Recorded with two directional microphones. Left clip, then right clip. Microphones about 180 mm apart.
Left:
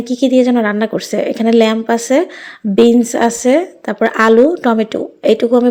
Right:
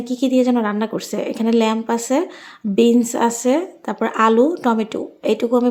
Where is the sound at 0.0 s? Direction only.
15° left (ahead or behind).